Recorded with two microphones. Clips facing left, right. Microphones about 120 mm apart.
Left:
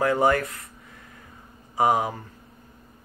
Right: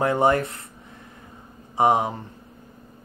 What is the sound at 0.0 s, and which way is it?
Speech, 25° right (ahead or behind).